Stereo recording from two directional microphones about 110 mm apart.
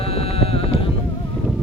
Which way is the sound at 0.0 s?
65° left (ahead or behind).